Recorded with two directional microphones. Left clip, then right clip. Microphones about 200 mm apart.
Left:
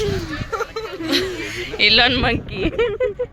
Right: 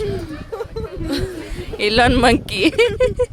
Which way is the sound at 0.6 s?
30° right (ahead or behind).